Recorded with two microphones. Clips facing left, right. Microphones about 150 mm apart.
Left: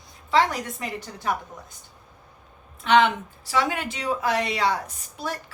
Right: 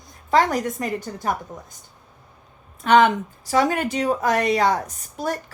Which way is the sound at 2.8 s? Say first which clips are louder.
Right 3 dB; 45° right (ahead or behind).